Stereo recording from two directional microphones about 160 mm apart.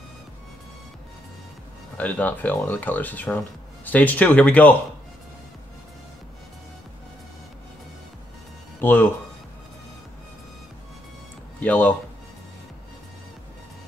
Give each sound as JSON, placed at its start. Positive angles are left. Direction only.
{"t": 2.0, "sound": "speech", "side_deg": 10}
{"t": 8.8, "sound": "speech", "side_deg": 10}
{"t": 11.6, "sound": "speech", "side_deg": 10}